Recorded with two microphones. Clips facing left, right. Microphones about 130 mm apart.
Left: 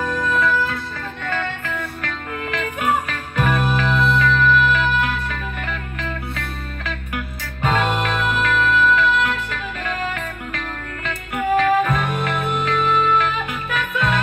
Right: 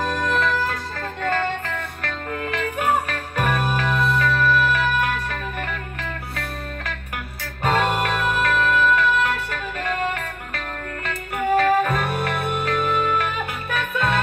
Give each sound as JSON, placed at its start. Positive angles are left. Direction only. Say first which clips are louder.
{"t": 0.0, "sound": "music", "louder": "left 1 dB", "side_deg": -35}
{"t": 7.6, "sound": "music", "louder": "even", "side_deg": -40}
{"t": 11.3, "sound": "music", "louder": "left 1 dB", "side_deg": -40}